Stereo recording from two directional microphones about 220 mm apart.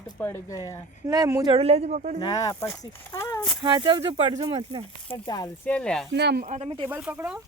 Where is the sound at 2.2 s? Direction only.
15° left (ahead or behind).